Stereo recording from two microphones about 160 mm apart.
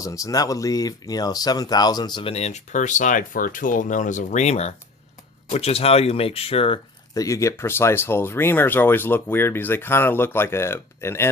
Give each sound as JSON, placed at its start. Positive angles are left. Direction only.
{"t": 0.0, "sound": "speech", "side_deg": 20}
{"t": 7.1, "sound": "speech", "side_deg": 20}